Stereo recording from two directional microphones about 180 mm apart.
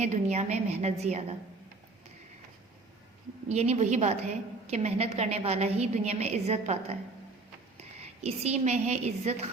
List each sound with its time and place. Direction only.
0.0 s a woman's voice: 40° right (ahead or behind)
3.5 s a woman's voice: 35° right (ahead or behind)